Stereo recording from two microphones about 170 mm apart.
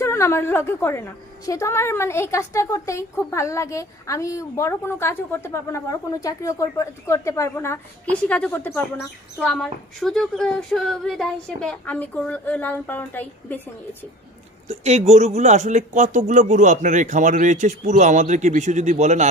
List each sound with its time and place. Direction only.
0.0 s a woman's voice: 15° left (ahead or behind)
9.5 s a woman's voice: centre (ahead or behind)
14.7 s speech: 40° right (ahead or behind)